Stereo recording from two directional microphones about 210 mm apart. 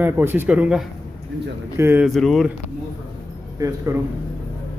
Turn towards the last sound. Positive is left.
turn(degrees=-15)  # may be behind; listen again after turning